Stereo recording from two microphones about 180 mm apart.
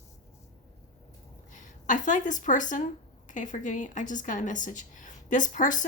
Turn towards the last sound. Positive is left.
turn(degrees=45)  # may be behind; listen again after turning